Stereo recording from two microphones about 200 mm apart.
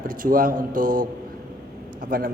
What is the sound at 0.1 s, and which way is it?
A woman's voice, 45° right (ahead or behind).